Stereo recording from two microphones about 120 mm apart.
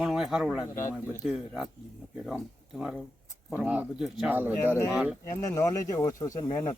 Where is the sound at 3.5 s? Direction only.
15° right (ahead or behind).